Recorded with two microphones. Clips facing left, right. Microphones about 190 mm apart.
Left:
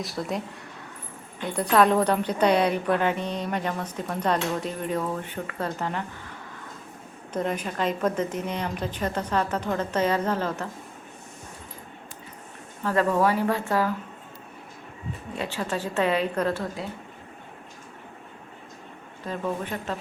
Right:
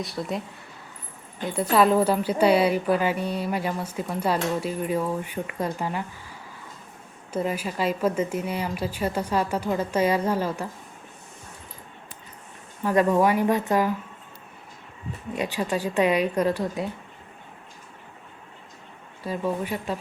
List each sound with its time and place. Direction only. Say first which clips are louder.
0.0 s speech: even; centre (ahead or behind)
1.7 s a woman's voice: even; 5° right (ahead or behind)
7.3 s a woman's voice: right 1 dB; 5° right (ahead or behind)
12.8 s a woman's voice: right 2 dB; 15° right (ahead or behind)
15.4 s a woman's voice: right 3 dB; 15° right (ahead or behind)
19.2 s a woman's voice: right 2 dB; 10° right (ahead or behind)